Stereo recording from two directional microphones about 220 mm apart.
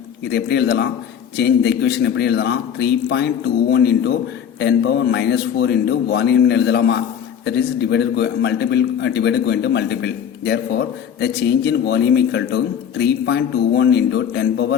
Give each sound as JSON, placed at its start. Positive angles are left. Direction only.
{"t": 0.3, "sound": "a man's voice", "side_deg": 50}